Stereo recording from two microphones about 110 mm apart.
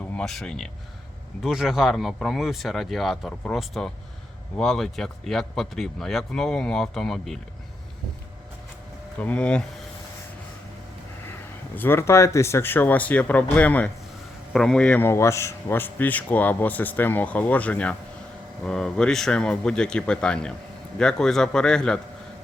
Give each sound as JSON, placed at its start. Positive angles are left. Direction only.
{"t": 0.2, "sound": "speech", "side_deg": 5}
{"t": 9.1, "sound": "speech", "side_deg": 10}
{"t": 11.3, "sound": "speech", "side_deg": 20}
{"t": 15.0, "sound": "speech", "side_deg": 25}